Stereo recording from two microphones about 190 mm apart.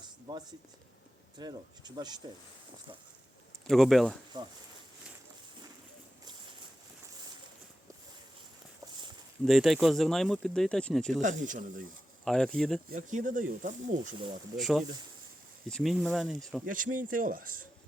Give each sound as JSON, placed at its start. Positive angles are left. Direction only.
{"t": 0.0, "sound": "a sound", "side_deg": -25}
{"t": 1.4, "sound": "speech", "side_deg": -20}
{"t": 3.7, "sound": "speech", "side_deg": 0}
{"t": 9.4, "sound": "speech", "side_deg": 0}
{"t": 11.2, "sound": "speech", "side_deg": -40}
{"t": 12.2, "sound": "speech", "side_deg": 5}
{"t": 12.9, "sound": "speech", "side_deg": -40}
{"t": 14.5, "sound": "speech", "side_deg": 0}
{"t": 16.6, "sound": "a man's voice", "side_deg": -45}